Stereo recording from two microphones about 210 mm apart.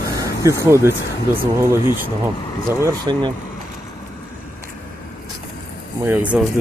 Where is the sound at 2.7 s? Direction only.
15° right (ahead or behind).